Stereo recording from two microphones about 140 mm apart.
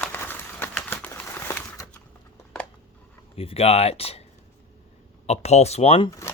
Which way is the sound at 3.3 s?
45° left (ahead or behind).